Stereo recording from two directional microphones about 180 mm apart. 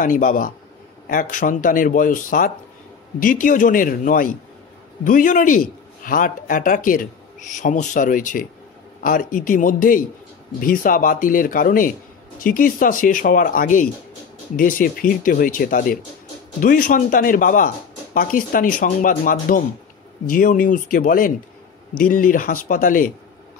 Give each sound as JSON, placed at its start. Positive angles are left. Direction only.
{"t": 0.0, "sound": "speech", "side_deg": 50}